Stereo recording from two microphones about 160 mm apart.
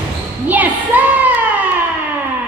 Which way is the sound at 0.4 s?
10° right (ahead or behind).